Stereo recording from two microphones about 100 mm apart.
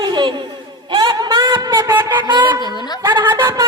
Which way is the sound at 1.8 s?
25° right (ahead or behind).